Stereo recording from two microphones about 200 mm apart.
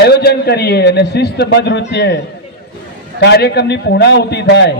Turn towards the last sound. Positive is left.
turn(degrees=55)  # may be behind; listen again after turning